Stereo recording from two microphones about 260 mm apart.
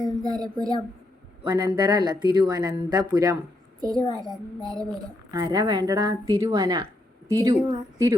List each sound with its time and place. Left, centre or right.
0.0 s speech: centre